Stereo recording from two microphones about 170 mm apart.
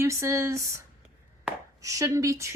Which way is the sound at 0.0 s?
15° right (ahead or behind).